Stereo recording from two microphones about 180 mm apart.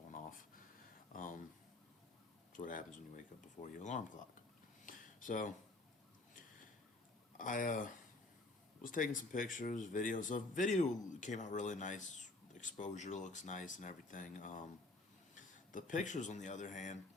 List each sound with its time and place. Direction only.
2.5 s speech: 45° left (ahead or behind)
4.9 s a sound: 45° left (ahead or behind)
7.3 s speech: 45° left (ahead or behind)